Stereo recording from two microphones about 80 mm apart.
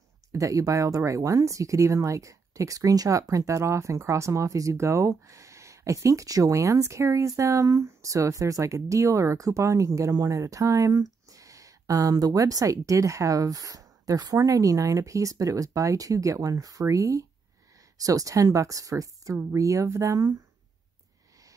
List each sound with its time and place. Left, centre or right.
0.3 s speech: right